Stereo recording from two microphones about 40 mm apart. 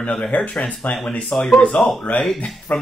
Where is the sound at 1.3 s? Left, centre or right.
Left.